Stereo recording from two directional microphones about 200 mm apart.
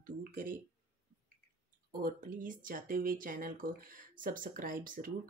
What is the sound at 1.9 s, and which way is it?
A woman's voice, 45° right (ahead or behind).